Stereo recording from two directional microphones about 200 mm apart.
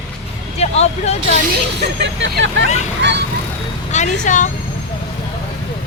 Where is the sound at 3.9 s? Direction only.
35° left (ahead or behind).